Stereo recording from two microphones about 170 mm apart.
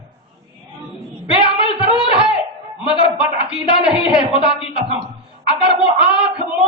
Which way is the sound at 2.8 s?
30° left (ahead or behind).